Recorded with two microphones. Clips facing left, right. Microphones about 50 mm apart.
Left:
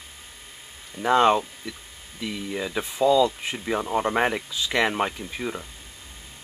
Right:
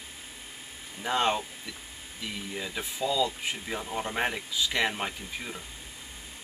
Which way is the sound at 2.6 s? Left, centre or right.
Left.